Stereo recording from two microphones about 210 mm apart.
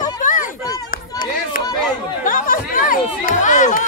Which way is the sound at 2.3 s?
40° left (ahead or behind).